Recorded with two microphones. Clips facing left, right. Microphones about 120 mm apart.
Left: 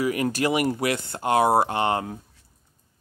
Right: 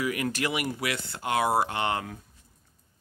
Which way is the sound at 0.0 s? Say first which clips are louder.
Left 5 dB; 35° left (ahead or behind).